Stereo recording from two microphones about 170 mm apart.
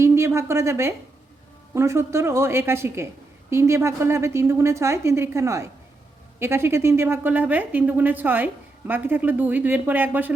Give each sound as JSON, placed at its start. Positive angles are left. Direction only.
{"t": 0.0, "sound": "a woman's voice", "side_deg": -15}